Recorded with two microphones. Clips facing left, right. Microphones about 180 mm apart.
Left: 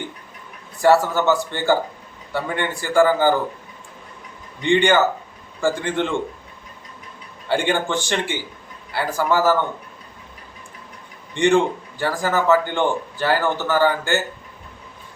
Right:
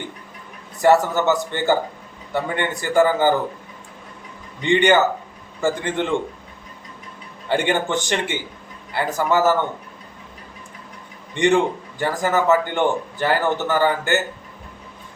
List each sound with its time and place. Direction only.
0.8 s a man's voice: 20° right (ahead or behind)
4.6 s a man's voice: 20° right (ahead or behind)
7.4 s a man's voice: 20° right (ahead or behind)
11.3 s a man's voice: 20° right (ahead or behind)